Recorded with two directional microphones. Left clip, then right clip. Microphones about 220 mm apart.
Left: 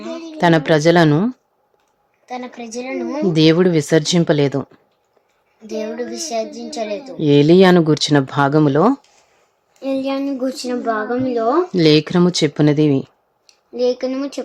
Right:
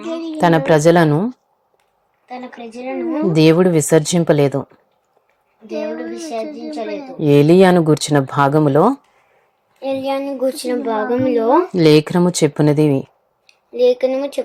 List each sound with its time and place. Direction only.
0.3 s a woman's voice: centre (ahead or behind)
2.6 s child singing: 15° left (ahead or behind)
3.3 s speech: centre (ahead or behind)
5.6 s child singing: 15° left (ahead or behind)
7.2 s speech: centre (ahead or behind)
9.8 s a woman's voice: 30° left (ahead or behind)
11.1 s speech: centre (ahead or behind)
13.8 s speech: 15° right (ahead or behind)